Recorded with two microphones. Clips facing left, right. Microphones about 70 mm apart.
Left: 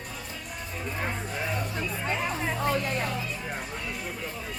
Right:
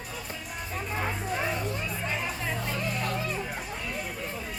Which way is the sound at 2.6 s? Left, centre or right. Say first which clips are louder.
Left 4 dB; left.